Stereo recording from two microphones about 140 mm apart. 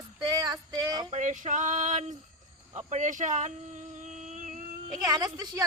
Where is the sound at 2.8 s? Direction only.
60° right (ahead or behind).